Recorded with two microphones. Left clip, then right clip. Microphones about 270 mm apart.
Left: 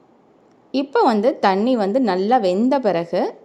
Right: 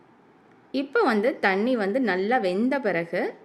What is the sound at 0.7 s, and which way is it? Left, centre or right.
A woman's voice, centre.